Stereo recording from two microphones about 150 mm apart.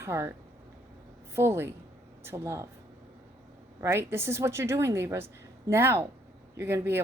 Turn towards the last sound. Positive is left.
turn(degrees=-15)  # may be behind; listen again after turning